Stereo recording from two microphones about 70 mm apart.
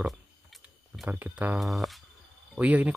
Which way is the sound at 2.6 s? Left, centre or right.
Centre.